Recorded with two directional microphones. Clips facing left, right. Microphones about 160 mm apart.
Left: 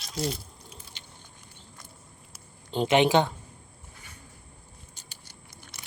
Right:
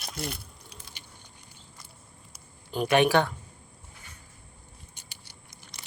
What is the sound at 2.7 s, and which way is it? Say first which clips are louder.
Speech: left 1 dB; 25° left (ahead or behind).